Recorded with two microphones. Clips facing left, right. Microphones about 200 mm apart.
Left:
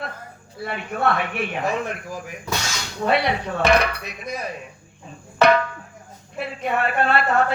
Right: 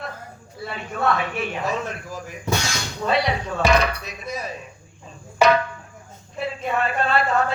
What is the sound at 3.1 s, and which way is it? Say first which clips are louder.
A man's voice: left 1 dB; 60° left (ahead or behind).